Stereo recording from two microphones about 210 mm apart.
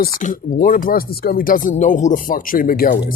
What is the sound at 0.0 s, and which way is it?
Speech, 40° left (ahead or behind).